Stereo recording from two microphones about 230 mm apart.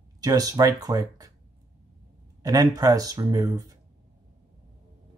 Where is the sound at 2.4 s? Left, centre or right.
Centre.